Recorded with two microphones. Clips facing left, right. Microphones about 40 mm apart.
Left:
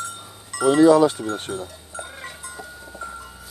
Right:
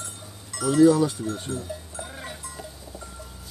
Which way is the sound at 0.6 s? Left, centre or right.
Left.